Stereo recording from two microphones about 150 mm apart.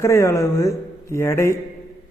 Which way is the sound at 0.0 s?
20° left (ahead or behind).